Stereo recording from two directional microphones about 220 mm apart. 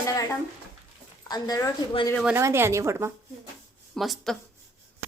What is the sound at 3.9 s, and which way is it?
Speech, centre (ahead or behind).